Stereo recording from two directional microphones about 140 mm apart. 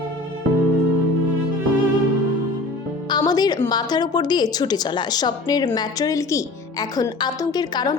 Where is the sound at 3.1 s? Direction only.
30° left (ahead or behind).